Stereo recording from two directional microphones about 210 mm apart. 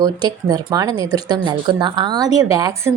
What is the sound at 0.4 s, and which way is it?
A woman's voice, 20° right (ahead or behind).